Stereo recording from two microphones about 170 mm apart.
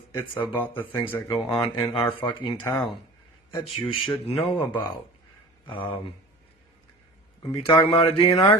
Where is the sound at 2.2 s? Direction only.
25° left (ahead or behind).